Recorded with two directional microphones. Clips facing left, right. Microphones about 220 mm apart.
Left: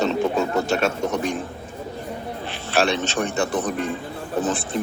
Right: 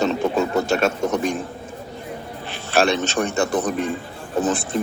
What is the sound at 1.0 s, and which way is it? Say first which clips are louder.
Speech: right 2 dB; 45° right (ahead or behind).